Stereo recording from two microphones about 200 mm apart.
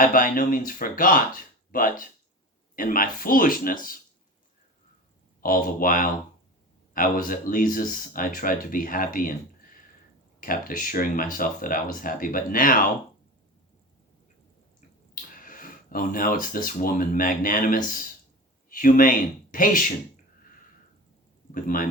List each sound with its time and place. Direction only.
0.0 s speech: 45° left (ahead or behind)
5.4 s speech: 45° left (ahead or behind)
10.4 s speech: 45° left (ahead or behind)
15.1 s speech: 45° left (ahead or behind)
21.5 s speech: 45° left (ahead or behind)